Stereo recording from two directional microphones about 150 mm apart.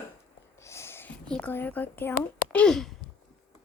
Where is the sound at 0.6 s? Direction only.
20° left (ahead or behind).